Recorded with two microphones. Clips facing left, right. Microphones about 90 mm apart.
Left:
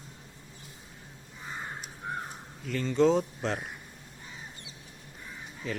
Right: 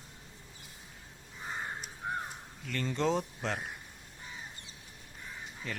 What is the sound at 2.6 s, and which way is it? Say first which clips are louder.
Speech: left 7 dB; 5° left (ahead or behind).